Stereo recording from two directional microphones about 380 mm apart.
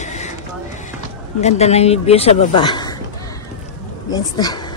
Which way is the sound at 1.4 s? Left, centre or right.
Centre.